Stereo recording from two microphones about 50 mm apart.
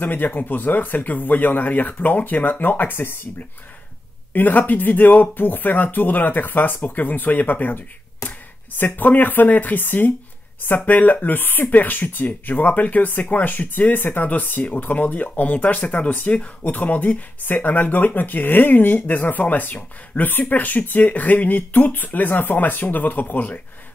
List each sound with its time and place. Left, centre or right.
0.0 s speech: left
4.3 s speech: left